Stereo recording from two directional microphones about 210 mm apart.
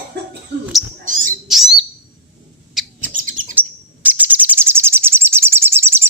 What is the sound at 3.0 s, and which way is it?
Bird, 40° right (ahead or behind).